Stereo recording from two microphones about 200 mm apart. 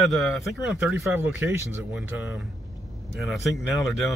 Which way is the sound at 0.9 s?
10° right (ahead or behind).